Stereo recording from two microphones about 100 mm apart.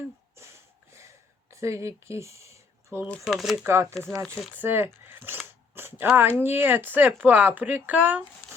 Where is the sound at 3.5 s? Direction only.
25° right (ahead or behind).